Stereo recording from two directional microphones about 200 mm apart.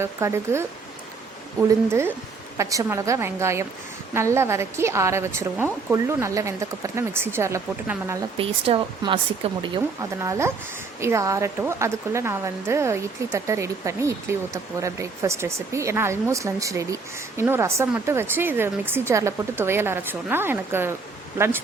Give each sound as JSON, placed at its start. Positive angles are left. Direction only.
{"t": 0.0, "sound": "speech", "side_deg": -15}
{"t": 1.9, "sound": "speech", "side_deg": -15}
{"t": 8.4, "sound": "speech", "side_deg": -30}
{"t": 10.0, "sound": "speech", "side_deg": -15}